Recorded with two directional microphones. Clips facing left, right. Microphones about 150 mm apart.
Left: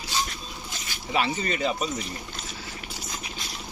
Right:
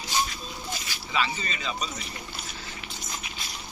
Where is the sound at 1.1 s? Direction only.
55° left (ahead or behind).